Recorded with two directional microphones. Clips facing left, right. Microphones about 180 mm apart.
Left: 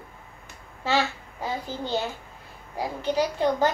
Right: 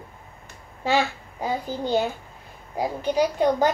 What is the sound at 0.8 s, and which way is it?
A child's voice, 15° right (ahead or behind).